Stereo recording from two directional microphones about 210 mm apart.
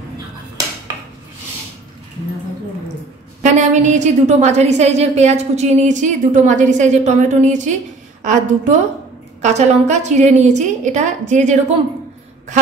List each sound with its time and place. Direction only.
3.4 s a woman's voice: 35° right (ahead or behind)